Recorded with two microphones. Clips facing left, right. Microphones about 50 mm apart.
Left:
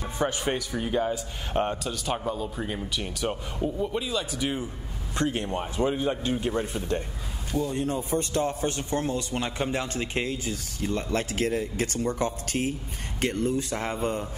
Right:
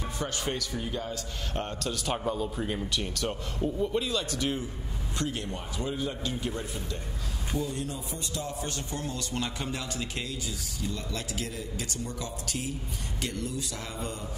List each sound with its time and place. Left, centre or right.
0.2 s a man's voice: left
1.8 s speech: centre
5.1 s speech: left